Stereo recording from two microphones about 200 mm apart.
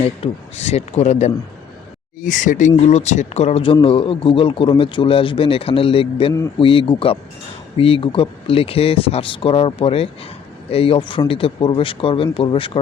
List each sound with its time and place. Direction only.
0.2 s speech: 35° left (ahead or behind)